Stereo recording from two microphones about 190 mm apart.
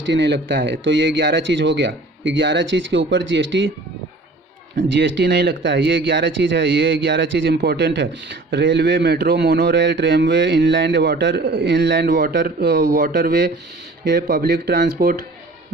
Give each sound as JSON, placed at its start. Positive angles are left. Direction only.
{"t": 0.1, "sound": "speech", "side_deg": -65}
{"t": 4.8, "sound": "speech", "side_deg": -70}